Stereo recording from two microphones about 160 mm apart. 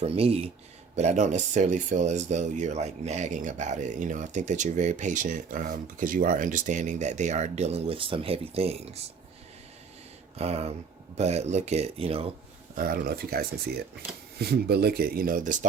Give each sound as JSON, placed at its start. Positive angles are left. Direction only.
{"t": 0.0, "sound": "speech", "side_deg": -40}
{"t": 10.3, "sound": "speech", "side_deg": -40}
{"t": 12.7, "sound": "speech", "side_deg": -65}
{"t": 14.3, "sound": "speech", "side_deg": -80}